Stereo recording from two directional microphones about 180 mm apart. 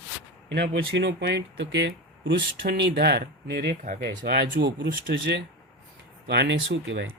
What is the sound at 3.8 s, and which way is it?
Speech, 50° right (ahead or behind).